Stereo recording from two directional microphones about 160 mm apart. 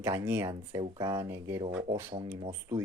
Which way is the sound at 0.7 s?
25° right (ahead or behind).